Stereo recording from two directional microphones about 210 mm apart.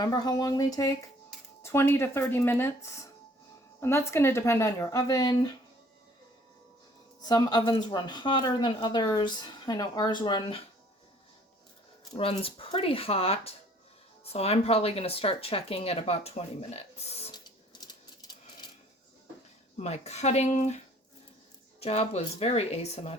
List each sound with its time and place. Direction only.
0.0 s a woman's voice: 20° left (ahead or behind)
7.2 s speech: 20° left (ahead or behind)
12.1 s speech: 25° left (ahead or behind)
19.7 s speech: 30° left (ahead or behind)